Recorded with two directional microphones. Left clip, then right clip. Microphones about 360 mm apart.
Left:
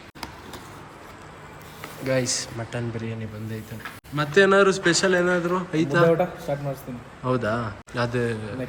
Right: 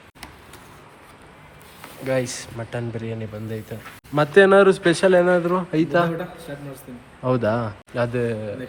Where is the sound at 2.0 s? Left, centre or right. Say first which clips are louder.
Right 1 dB; centre.